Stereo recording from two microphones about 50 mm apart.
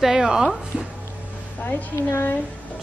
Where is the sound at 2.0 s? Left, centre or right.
Left.